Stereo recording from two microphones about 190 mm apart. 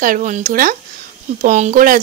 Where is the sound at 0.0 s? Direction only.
45° right (ahead or behind).